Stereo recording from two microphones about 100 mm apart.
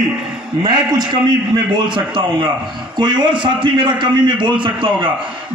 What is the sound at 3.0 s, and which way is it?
A man's voice, 50° right (ahead or behind).